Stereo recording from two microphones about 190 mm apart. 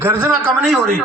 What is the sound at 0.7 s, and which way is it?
Speech, 5° left (ahead or behind).